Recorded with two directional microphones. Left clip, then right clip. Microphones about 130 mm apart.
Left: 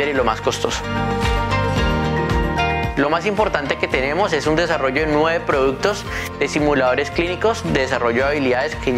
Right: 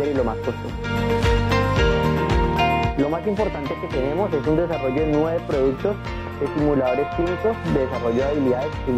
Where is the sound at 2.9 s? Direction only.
30° right (ahead or behind).